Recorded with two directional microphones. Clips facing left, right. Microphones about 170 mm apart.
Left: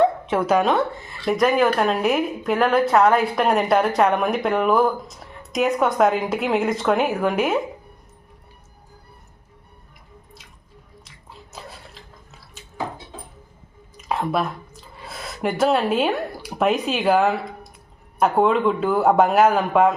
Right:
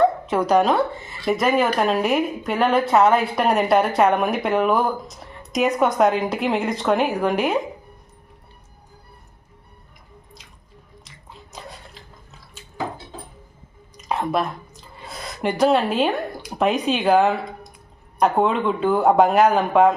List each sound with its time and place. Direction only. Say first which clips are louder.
0.0 s speech: even; 5° left (ahead or behind)
11.0 s biting: even; centre (ahead or behind)
13.9 s speech: even; centre (ahead or behind)